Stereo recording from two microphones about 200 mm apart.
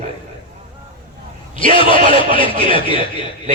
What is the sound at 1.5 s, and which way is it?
Speech, 25° left (ahead or behind).